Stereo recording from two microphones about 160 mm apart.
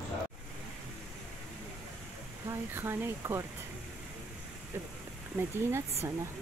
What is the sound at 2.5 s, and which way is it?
Speech, 15° right (ahead or behind).